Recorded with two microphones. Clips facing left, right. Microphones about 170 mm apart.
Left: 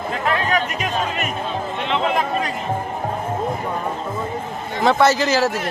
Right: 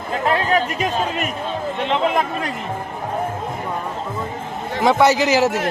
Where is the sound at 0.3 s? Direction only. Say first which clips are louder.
Right 2 dB; 35° right (ahead or behind).